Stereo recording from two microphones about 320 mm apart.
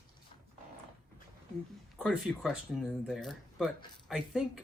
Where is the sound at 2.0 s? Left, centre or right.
Centre.